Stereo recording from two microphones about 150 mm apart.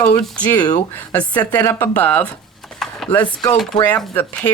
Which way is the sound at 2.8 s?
Centre (ahead or behind).